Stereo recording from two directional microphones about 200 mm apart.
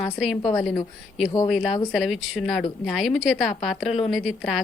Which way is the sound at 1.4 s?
Centre (ahead or behind).